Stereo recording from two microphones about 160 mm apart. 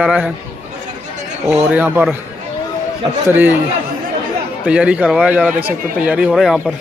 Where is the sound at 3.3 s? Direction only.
10° right (ahead or behind).